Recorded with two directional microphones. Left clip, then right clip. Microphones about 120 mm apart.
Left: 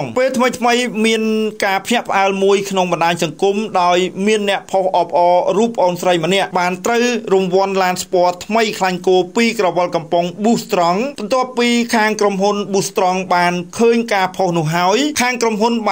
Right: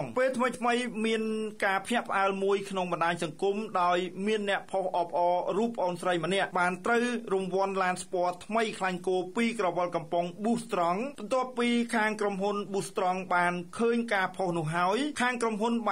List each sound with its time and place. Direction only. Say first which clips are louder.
0.1 s speech: left 13 dB; 25° left (ahead or behind)
1.6 s speech: left 9 dB; 25° left (ahead or behind)